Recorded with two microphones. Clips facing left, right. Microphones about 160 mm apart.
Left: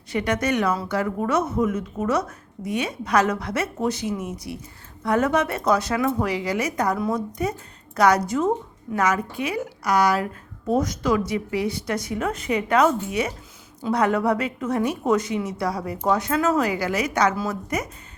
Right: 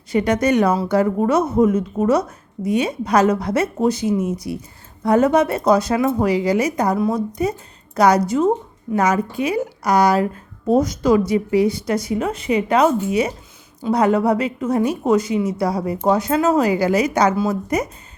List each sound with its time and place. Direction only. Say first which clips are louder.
0.1 s a woman's voice: right 6 dB; 35° right (ahead or behind)
7.0 s speech: right 5 dB; 10° right (ahead or behind)
7.9 s a woman's voice: right 4 dB; 35° right (ahead or behind)
12.1 s speech: right 3 dB; 25° right (ahead or behind)
13.9 s a woman's voice: right 5 dB; 30° right (ahead or behind)
17.3 s speech: right 7 dB; 20° right (ahead or behind)